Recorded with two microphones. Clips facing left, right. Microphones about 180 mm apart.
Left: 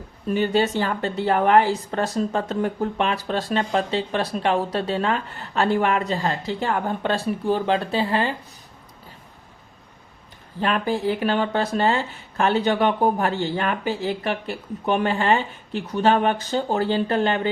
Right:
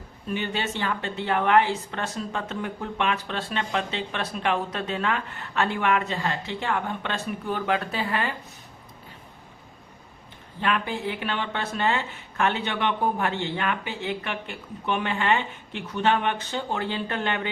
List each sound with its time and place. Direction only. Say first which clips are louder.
0.3 s speech: left 8 dB; 40° left (ahead or behind)
10.6 s speech: left 4 dB; 35° left (ahead or behind)